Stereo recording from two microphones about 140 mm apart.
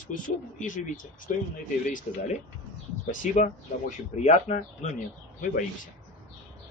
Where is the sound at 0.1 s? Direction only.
70° left (ahead or behind).